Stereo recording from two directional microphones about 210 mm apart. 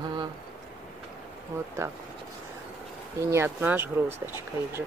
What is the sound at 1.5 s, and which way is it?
Speech, 10° right (ahead or behind).